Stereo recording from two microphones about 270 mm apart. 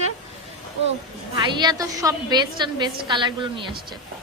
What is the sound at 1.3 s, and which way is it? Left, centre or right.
A woman's voice, centre.